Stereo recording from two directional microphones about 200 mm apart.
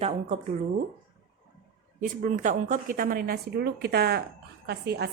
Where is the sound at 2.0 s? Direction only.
40° right (ahead or behind).